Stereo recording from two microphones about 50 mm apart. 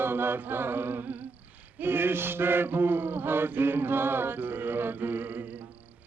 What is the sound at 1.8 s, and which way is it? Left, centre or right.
Mantra, right.